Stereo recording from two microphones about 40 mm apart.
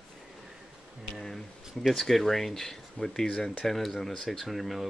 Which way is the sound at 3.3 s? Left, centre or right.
Left.